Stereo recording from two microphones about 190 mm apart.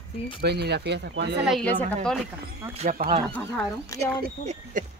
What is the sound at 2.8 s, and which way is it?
Speech, 45° right (ahead or behind).